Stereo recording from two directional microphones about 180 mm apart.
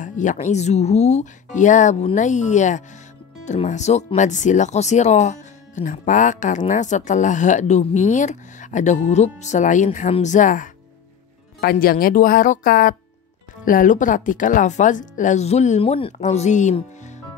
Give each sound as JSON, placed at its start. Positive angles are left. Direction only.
{"t": 0.0, "sound": "a woman's voice", "side_deg": 45}
{"t": 11.6, "sound": "a woman's voice", "side_deg": 55}